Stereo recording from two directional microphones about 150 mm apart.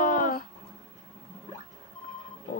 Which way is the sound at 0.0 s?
60° left (ahead or behind).